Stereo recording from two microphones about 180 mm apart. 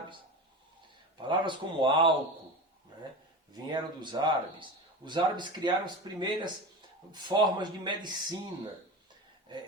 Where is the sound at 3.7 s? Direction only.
25° right (ahead or behind).